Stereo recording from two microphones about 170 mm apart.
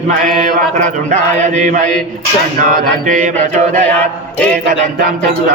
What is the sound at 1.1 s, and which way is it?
Mantra, 45° right (ahead or behind).